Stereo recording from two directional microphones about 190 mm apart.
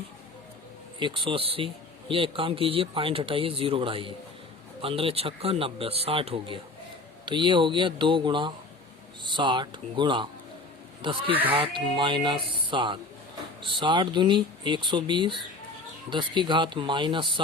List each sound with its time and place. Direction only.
0.9 s a man's voice: 25° right (ahead or behind)